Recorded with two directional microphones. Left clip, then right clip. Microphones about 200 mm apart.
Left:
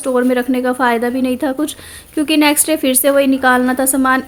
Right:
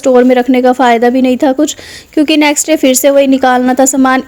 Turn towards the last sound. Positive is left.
turn(degrees=-30)  # may be behind; listen again after turning